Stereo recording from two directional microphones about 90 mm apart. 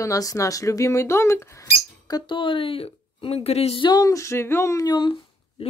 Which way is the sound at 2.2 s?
70° left (ahead or behind).